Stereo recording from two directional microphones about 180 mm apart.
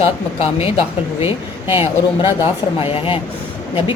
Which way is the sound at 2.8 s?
30° left (ahead or behind).